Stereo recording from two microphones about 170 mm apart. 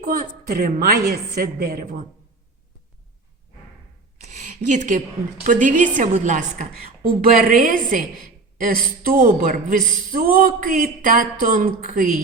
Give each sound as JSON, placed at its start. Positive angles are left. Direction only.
{"t": 0.0, "sound": "speech", "side_deg": -60}
{"t": 4.2, "sound": "a woman's voice", "side_deg": -45}